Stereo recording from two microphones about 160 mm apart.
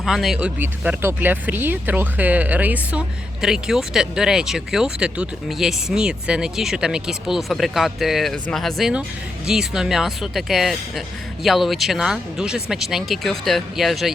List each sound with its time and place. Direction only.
0.0 s speech: centre (ahead or behind)